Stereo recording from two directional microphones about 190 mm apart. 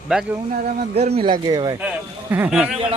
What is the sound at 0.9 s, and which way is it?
Speech, 35° right (ahead or behind).